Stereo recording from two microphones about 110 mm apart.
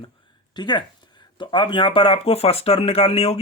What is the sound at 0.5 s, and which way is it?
Speech, 40° left (ahead or behind).